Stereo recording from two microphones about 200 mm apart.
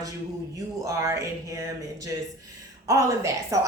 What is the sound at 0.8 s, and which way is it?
Speech, 15° right (ahead or behind).